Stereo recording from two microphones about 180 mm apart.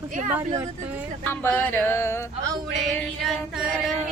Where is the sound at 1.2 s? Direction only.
10° left (ahead or behind).